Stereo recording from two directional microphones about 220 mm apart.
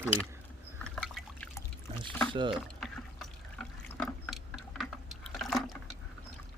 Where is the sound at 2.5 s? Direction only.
Centre (ahead or behind).